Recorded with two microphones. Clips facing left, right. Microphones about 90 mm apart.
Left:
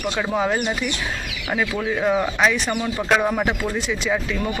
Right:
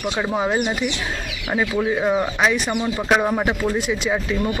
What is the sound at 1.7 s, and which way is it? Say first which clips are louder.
Speech: right 1 dB; 10° right (ahead or behind).